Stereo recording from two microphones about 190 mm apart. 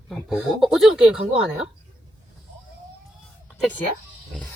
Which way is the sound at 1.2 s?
30° right (ahead or behind).